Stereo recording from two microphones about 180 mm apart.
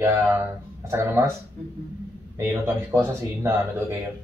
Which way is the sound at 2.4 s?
10° right (ahead or behind).